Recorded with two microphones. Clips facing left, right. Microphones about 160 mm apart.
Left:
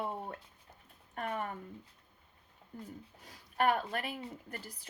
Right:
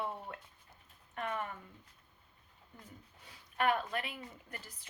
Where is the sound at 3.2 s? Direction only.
40° left (ahead or behind).